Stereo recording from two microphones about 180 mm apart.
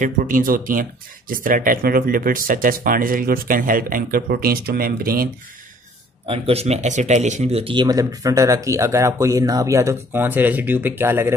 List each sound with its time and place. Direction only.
0.0 s speech: 50° right (ahead or behind)
6.2 s speech: 30° right (ahead or behind); by 11.3 s 10° right (ahead or behind)